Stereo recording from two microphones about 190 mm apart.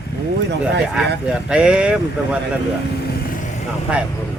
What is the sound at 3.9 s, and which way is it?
Speech, 5° right (ahead or behind).